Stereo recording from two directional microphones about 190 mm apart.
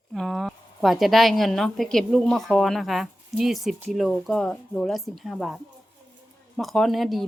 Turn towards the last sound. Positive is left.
turn(degrees=0)  # may be behind; listen again after turning